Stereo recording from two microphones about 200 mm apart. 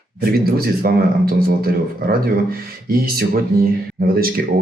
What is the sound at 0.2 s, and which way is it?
Speech, 50° right (ahead or behind).